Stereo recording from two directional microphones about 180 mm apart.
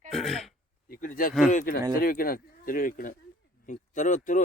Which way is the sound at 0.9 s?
50° left (ahead or behind).